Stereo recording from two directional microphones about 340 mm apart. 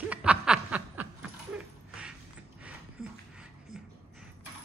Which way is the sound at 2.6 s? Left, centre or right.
Centre.